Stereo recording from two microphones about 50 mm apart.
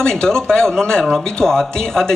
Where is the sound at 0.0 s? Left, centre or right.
Centre.